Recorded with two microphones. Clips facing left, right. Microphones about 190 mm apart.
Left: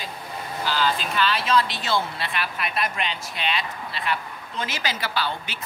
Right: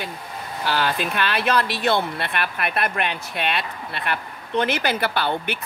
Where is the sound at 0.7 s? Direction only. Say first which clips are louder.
Right 2 dB; 60° right (ahead or behind).